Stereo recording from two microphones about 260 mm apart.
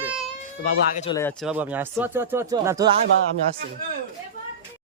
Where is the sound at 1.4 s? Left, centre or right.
Centre.